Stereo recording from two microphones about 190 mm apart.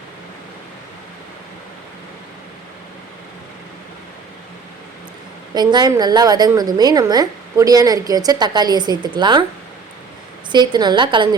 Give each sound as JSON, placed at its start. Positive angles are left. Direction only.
{"t": 5.5, "sound": "a woman's voice", "side_deg": -20}
{"t": 10.5, "sound": "a woman's voice", "side_deg": -25}